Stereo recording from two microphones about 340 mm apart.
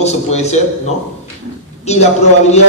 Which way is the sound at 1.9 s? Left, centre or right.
Centre.